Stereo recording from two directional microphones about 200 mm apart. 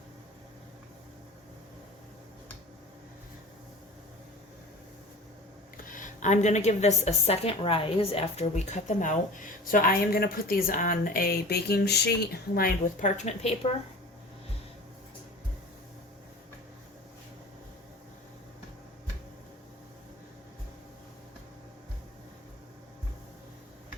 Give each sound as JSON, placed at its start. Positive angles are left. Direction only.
{"t": 5.7, "sound": "a woman's voice", "side_deg": 40}